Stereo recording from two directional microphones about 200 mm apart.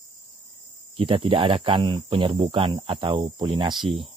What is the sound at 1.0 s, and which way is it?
Speech, 25° right (ahead or behind).